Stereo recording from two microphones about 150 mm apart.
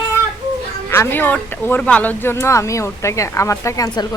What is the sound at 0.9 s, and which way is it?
Speech, 15° left (ahead or behind).